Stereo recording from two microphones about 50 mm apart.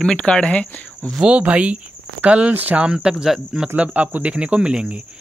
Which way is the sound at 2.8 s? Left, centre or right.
Centre.